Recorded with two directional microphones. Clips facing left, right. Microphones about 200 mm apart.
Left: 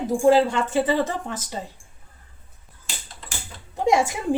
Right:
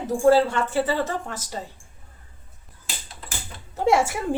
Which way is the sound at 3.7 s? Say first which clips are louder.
Even; 15° left (ahead or behind).